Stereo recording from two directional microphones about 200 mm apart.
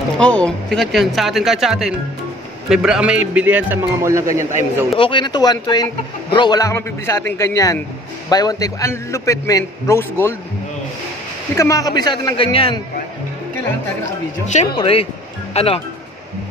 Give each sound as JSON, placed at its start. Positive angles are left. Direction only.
{"t": 0.2, "sound": "speech", "side_deg": 5}
{"t": 4.9, "sound": "a man's voice", "side_deg": 25}
{"t": 11.5, "sound": "a man's voice", "side_deg": 15}
{"t": 14.8, "sound": "a man's voice", "side_deg": 30}